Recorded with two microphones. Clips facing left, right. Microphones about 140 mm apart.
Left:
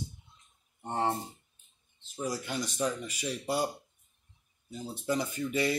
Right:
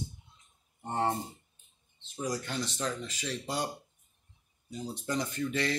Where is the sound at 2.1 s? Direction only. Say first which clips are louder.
Even; 10° left (ahead or behind).